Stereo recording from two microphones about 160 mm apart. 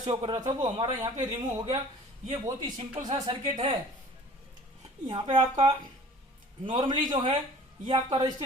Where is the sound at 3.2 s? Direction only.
35° right (ahead or behind).